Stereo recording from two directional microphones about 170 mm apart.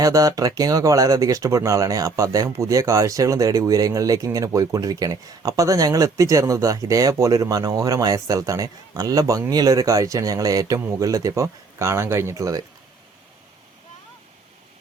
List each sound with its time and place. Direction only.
0.0 s speech: 20° right (ahead or behind)